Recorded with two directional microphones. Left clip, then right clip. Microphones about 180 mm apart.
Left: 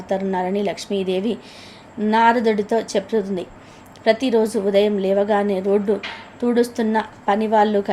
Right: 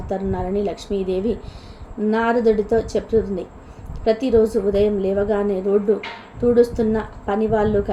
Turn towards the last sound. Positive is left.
turn(degrees=15)  # may be behind; listen again after turning